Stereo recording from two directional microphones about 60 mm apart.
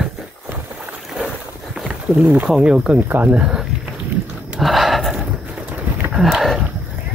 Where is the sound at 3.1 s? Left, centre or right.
Right.